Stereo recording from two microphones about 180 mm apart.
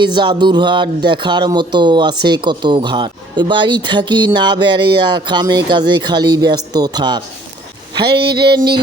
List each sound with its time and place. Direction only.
0.0 s speech: 25° right (ahead or behind)